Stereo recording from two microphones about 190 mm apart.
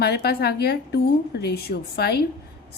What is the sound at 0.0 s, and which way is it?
A woman's voice, 55° left (ahead or behind).